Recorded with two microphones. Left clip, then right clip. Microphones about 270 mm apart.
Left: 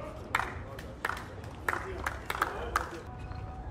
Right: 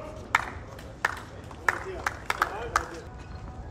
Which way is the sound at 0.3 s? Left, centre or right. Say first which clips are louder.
Right 5 dB; right.